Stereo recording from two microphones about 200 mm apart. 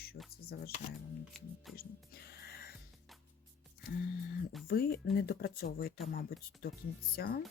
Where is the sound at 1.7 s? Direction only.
50° left (ahead or behind).